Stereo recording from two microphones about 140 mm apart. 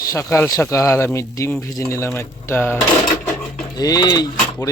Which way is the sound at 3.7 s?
25° left (ahead or behind).